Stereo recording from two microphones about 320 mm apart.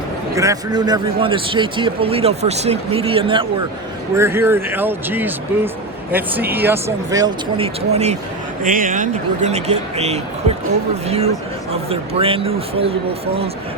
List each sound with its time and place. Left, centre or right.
0.3 s a man's voice: centre